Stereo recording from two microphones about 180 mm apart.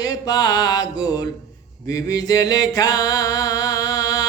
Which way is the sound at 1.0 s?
20° left (ahead or behind).